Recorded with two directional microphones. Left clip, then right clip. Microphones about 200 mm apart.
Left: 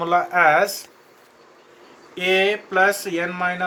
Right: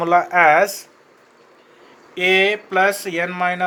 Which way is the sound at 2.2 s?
45° right (ahead or behind).